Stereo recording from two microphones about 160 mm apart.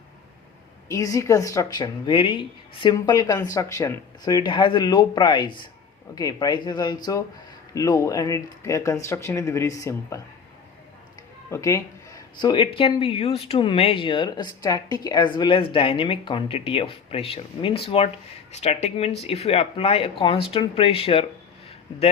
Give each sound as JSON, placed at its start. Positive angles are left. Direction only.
{"t": 0.9, "sound": "speech", "side_deg": 20}
{"t": 11.5, "sound": "speech", "side_deg": 20}